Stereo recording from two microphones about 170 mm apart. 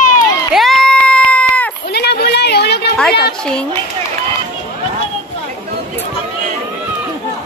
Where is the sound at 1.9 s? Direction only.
70° left (ahead or behind).